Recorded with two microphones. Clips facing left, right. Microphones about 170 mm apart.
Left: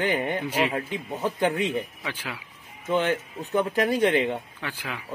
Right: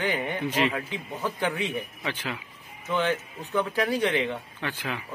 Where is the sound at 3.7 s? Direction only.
45° left (ahead or behind).